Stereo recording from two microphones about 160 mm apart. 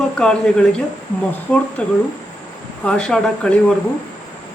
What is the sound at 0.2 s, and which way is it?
Speech, 5° left (ahead or behind).